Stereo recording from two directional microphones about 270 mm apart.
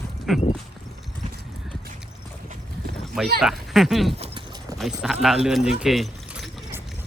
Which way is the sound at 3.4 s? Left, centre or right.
Centre.